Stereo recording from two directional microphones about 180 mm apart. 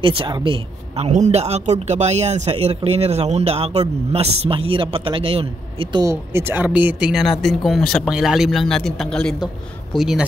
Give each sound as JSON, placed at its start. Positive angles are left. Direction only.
{"t": 0.0, "sound": "speech", "side_deg": -30}